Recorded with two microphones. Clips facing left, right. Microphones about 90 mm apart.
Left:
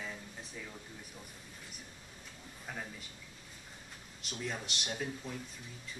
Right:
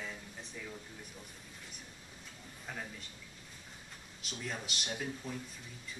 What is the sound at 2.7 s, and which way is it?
Speech, 5° left (ahead or behind).